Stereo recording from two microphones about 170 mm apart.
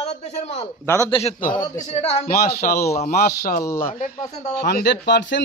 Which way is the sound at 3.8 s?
50° left (ahead or behind).